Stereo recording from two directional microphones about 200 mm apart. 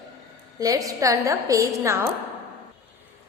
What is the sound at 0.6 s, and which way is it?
A woman's voice, 15° right (ahead or behind).